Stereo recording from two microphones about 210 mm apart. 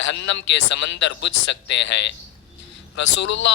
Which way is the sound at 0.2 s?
60° left (ahead or behind).